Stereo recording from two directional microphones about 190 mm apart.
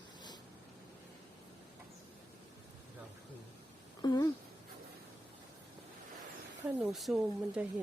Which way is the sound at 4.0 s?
20° left (ahead or behind).